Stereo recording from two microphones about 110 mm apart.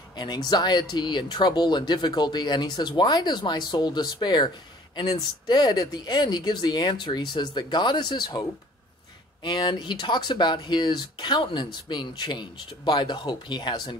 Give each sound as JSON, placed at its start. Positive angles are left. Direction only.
{"t": 0.1, "sound": "speech", "side_deg": 40}
{"t": 5.5, "sound": "speech", "side_deg": 40}